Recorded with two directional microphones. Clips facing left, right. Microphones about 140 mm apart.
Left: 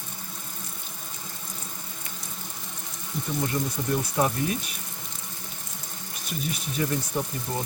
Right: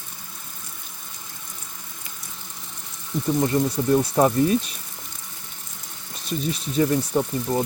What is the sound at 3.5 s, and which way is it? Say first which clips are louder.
Speech: right 7 dB; 60° right (ahead or behind).